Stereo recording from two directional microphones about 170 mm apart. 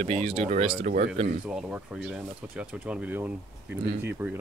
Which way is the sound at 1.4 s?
5° right (ahead or behind).